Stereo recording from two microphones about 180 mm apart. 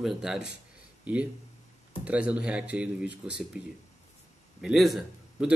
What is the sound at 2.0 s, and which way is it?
A man's voice, 5° right (ahead or behind).